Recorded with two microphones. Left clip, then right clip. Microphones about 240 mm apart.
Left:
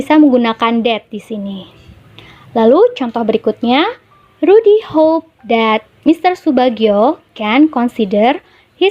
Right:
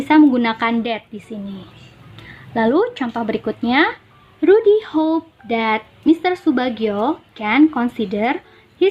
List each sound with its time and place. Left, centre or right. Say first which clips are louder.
0.0 s a woman's voice: left 4 dB; left